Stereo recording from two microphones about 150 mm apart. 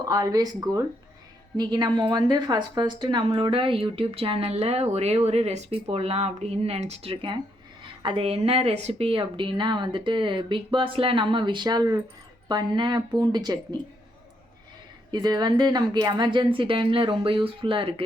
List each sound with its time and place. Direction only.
0.1 s a woman's voice: 25° right (ahead or behind)
15.1 s a woman's voice: 30° right (ahead or behind)